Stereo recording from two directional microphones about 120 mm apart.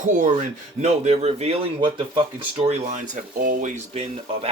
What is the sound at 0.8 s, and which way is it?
Speech, 65° right (ahead or behind).